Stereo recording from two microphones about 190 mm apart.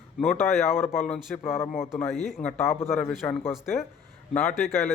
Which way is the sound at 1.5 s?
15° left (ahead or behind).